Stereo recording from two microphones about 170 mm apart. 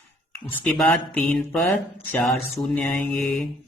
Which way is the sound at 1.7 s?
15° left (ahead or behind).